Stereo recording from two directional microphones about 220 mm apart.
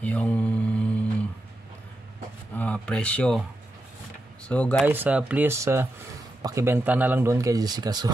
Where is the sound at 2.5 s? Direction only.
5° left (ahead or behind).